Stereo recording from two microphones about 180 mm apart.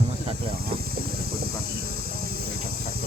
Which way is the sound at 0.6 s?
60° right (ahead or behind).